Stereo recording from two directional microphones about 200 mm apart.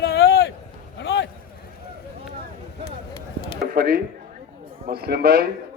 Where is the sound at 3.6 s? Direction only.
45° right (ahead or behind).